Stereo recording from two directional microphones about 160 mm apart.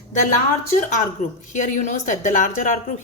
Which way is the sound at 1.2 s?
50° left (ahead or behind).